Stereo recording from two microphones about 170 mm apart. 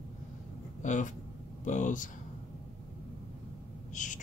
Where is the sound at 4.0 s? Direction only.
50° left (ahead or behind).